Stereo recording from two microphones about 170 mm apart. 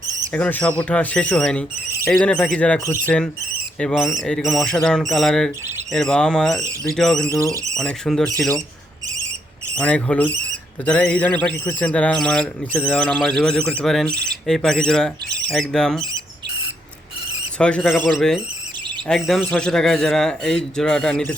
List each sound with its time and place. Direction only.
0.3 s speech: 10° left (ahead or behind)
2.8 s speech: 15° left (ahead or behind)
3.8 s speech: centre (ahead or behind)
7.3 s speech: 20° right (ahead or behind)
7.8 s speech: centre (ahead or behind)
9.7 s speech: 5° left (ahead or behind)
17.6 s speech: 5° left (ahead or behind)